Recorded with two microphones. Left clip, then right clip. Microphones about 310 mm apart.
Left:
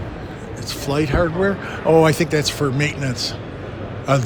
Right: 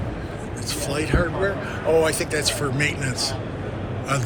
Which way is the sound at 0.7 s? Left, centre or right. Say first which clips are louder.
Left 4 dB; centre.